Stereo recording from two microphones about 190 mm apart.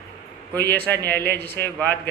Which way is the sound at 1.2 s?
60° right (ahead or behind).